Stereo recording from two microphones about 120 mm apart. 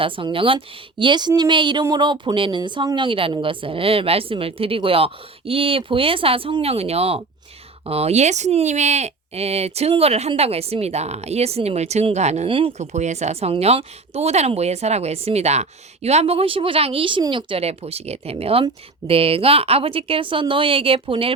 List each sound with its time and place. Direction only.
0.0 s speech: 45° right (ahead or behind); by 12.5 s 65° right (ahead or behind)
12.5 s speech: 45° right (ahead or behind)
12.7 s speech: 70° right (ahead or behind); by 17.6 s 40° right (ahead or behind)
17.6 s speech: 60° right (ahead or behind)